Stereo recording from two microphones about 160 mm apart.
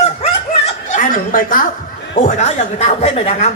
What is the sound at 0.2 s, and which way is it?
Snicker, 45° left (ahead or behind).